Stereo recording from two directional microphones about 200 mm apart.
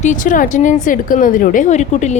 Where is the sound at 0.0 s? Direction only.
40° left (ahead or behind).